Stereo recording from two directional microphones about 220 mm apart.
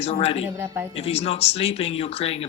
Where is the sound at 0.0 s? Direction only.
25° left (ahead or behind).